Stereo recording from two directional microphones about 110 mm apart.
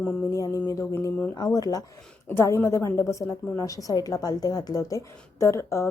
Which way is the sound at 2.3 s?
20° left (ahead or behind).